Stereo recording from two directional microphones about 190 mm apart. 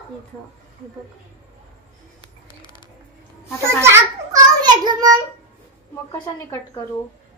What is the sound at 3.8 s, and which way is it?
Child singing, 15° right (ahead or behind).